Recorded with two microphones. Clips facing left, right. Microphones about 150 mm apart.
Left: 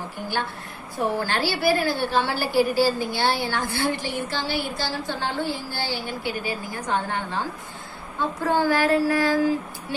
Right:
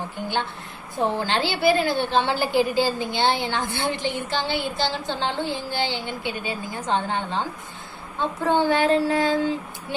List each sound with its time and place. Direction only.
0.9 s a woman's voice: 20° right (ahead or behind)